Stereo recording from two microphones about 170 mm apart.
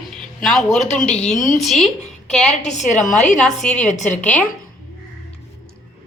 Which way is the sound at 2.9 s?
45° left (ahead or behind).